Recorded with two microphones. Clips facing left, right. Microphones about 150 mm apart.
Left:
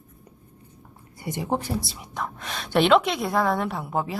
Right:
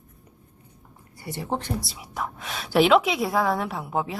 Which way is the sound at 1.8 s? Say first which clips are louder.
Even; centre (ahead or behind).